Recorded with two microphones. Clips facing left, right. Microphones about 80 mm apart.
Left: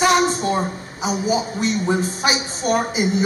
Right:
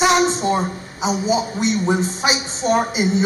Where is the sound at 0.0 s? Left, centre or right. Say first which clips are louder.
Right 1 dB; right.